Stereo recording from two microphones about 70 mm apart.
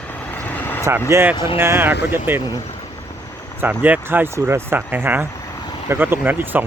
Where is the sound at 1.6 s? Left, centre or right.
Right.